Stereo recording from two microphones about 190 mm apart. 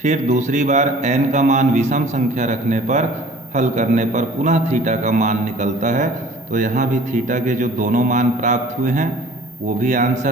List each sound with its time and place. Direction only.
0.0 s speech: 40° right (ahead or behind)